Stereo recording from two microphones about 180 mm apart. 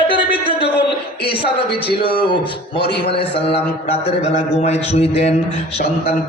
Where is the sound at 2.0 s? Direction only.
30° left (ahead or behind).